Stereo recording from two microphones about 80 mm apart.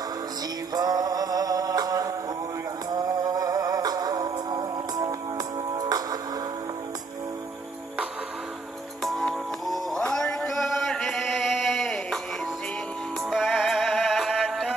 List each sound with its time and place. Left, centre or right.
0.7 s music: right
9.0 s music: centre
10.1 s a sound: centre
13.2 s music: centre